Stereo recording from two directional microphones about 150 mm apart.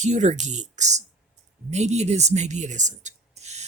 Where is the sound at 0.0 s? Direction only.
50° right (ahead or behind).